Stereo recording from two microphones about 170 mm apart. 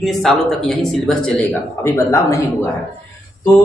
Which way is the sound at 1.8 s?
15° left (ahead or behind).